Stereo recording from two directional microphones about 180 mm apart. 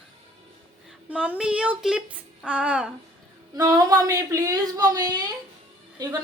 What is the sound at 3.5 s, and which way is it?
Speech, 20° right (ahead or behind).